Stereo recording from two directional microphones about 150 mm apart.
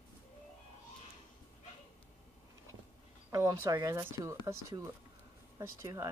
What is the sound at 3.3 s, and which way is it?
Speech, 20° right (ahead or behind).